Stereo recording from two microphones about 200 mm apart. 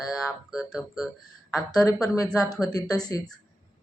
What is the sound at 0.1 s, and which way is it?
Speech, centre (ahead or behind).